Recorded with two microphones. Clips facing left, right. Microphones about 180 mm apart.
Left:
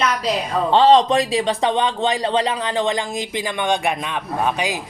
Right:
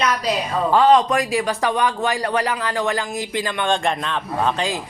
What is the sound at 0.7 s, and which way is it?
Speech, 30° left (ahead or behind).